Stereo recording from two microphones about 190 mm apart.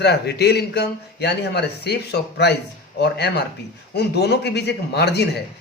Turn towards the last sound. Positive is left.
turn(degrees=60)  # may be behind; listen again after turning